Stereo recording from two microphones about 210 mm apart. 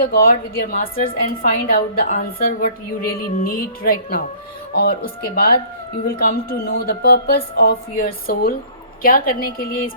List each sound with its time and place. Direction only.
0.0 s a woman's voice: 45° left (ahead or behind)